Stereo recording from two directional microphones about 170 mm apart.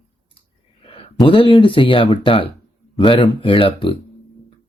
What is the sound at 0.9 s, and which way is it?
Speech, 30° left (ahead or behind).